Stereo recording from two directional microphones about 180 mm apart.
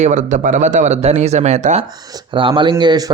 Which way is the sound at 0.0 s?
40° right (ahead or behind).